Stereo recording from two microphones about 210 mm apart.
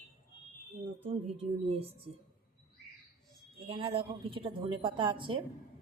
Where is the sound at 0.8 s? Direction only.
25° right (ahead or behind).